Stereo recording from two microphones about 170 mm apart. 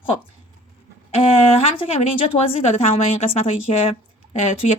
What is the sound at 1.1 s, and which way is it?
Speech, 35° left (ahead or behind).